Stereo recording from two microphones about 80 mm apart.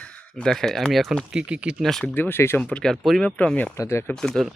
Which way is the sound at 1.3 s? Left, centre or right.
Centre.